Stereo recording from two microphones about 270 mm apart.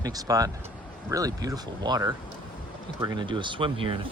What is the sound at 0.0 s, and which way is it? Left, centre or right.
Speech, centre.